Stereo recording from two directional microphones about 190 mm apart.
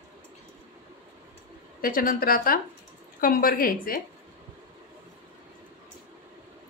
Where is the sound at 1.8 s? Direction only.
50° left (ahead or behind).